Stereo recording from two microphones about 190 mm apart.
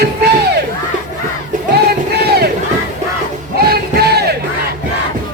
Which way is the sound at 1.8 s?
55° right (ahead or behind).